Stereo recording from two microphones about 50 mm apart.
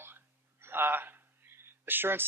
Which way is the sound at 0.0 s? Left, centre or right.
Right.